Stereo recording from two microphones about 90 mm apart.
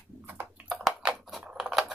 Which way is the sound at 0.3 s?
20° right (ahead or behind).